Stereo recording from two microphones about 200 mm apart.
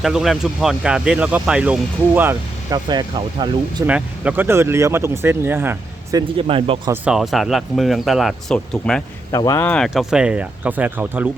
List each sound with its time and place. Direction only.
0.0 s speech: centre (ahead or behind); by 3.8 s 20° right (ahead or behind)
3.8 s speech: 5° right (ahead or behind); by 6.9 s 25° right (ahead or behind)
6.9 s speech: 5° right (ahead or behind)
9.3 s speech: 15° left (ahead or behind); by 11.3 s 10° right (ahead or behind)